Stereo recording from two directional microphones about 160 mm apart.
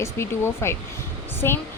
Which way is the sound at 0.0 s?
15° left (ahead or behind).